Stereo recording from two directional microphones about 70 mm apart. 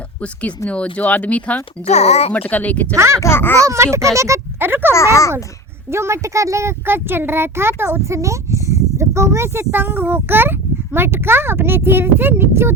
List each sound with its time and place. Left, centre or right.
0.7 s speech: centre
2.9 s speech: right
3.2 s speech: left
3.6 s speech: right
4.6 s a child's voice: right